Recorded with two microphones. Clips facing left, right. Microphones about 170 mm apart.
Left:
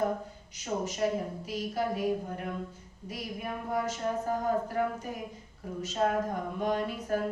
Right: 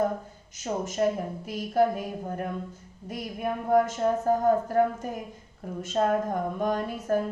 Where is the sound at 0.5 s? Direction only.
45° right (ahead or behind).